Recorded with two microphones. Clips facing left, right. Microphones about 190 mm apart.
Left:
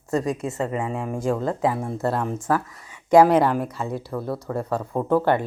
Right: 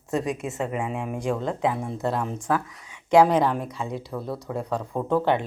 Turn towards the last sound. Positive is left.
turn(degrees=5)  # may be behind; listen again after turning